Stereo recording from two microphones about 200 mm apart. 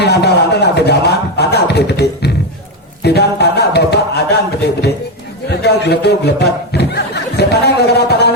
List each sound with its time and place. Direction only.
0.0 s music: 55° left (ahead or behind)
3.0 s a sound: 55° left (ahead or behind)
5.5 s speech: 55° left (ahead or behind)